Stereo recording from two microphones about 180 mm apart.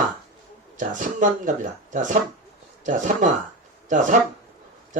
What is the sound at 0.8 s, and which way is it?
Speech, 45° right (ahead or behind).